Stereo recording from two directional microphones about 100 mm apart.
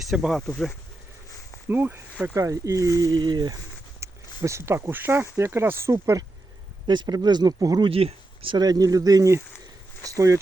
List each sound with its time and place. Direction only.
0.0 s speech: 5° right (ahead or behind)
0.4 s speech: 10° left (ahead or behind)
1.7 s speech: 20° right (ahead or behind)
2.3 s speech: 30° right (ahead or behind)
3.0 s speech: 45° right (ahead or behind)
4.0 s speech: 30° right (ahead or behind)
6.8 s speech: 50° right (ahead or behind)
7.9 s speech: 70° right (ahead or behind)
8.5 s speech: 40° right (ahead or behind)